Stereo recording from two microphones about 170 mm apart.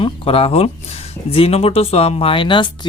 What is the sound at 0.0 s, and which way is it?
Speech, 30° left (ahead or behind).